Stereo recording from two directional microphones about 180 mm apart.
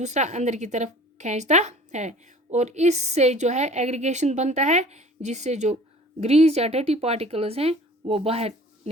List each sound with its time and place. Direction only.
0.0 s a woman's voice: 40° right (ahead or behind)